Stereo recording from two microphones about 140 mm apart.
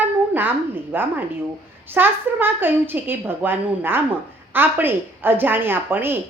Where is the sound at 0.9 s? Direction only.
15° right (ahead or behind).